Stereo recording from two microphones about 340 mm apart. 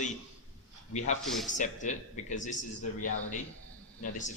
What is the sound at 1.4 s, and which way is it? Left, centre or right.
Speech, left.